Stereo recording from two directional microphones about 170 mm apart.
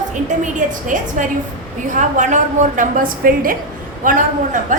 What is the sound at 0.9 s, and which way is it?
A woman's voice, 50° right (ahead or behind).